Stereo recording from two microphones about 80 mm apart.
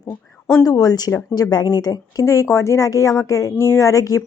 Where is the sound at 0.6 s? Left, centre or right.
Left.